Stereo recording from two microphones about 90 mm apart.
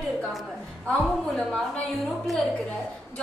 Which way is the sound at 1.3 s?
5° left (ahead or behind).